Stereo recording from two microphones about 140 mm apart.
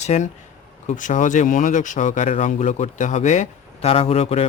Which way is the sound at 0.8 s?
65° left (ahead or behind).